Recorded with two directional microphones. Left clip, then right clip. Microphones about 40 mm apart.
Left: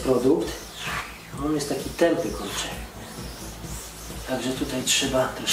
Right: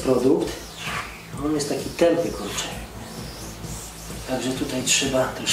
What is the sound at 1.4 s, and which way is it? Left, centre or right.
Speech, right.